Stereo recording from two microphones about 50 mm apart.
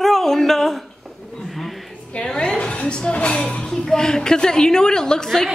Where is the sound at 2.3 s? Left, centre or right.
Left.